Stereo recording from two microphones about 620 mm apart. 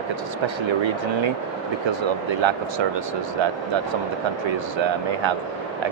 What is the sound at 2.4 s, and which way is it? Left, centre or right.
Speech, right.